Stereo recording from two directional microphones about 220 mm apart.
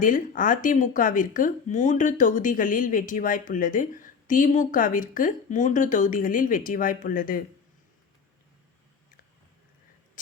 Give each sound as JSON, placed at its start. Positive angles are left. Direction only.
{"t": 0.0, "sound": "speech", "side_deg": 35}